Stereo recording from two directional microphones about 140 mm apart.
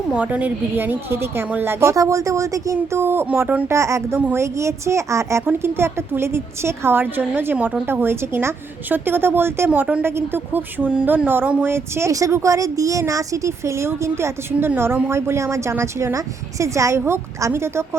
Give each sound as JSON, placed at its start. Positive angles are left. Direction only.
{"t": 0.1, "sound": "a woman's voice", "side_deg": -10}